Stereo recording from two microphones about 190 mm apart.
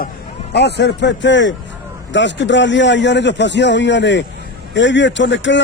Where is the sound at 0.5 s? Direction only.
60° left (ahead or behind).